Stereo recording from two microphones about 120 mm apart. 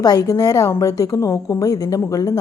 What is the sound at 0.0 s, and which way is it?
A woman's voice, 30° left (ahead or behind).